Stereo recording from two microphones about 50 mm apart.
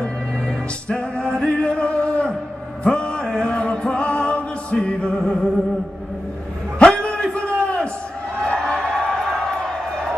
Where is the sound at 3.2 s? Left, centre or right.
Centre.